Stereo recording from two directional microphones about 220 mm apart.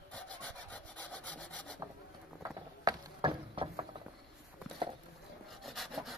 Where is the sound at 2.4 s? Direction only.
15° right (ahead or behind).